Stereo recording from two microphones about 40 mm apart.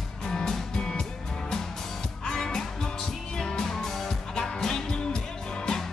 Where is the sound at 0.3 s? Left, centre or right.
Centre.